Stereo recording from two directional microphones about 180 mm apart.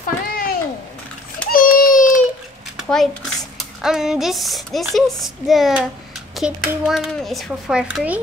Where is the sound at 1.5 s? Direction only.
50° left (ahead or behind).